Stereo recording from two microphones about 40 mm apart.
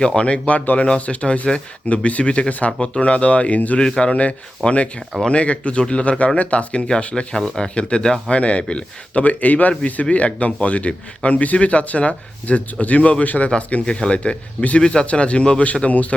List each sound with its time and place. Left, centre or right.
0.2 s speech: left
2.7 s speech: left
3.0 s speech: left
3.8 s speech: left
13.8 s speech: left